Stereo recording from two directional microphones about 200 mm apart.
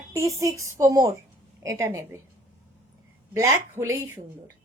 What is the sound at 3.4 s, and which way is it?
Speech, 15° right (ahead or behind).